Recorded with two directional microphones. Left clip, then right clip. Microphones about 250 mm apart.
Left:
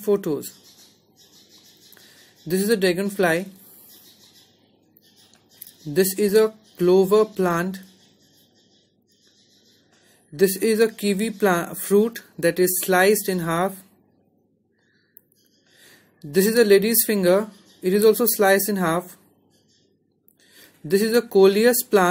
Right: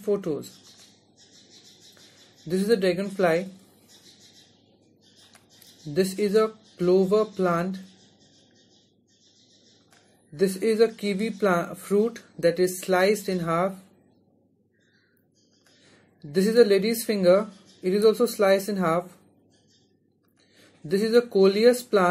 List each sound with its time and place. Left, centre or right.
0.0 s speech: left
2.4 s speech: left
5.9 s speech: left
10.3 s speech: left
16.2 s speech: left
20.9 s speech: left